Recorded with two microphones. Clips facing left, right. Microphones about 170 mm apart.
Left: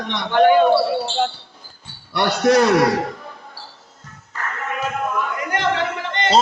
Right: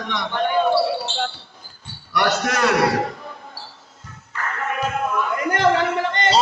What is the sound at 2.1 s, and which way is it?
Mantra, 35° left (ahead or behind).